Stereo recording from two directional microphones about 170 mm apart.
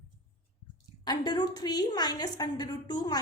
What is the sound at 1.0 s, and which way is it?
A woman's voice, 25° left (ahead or behind).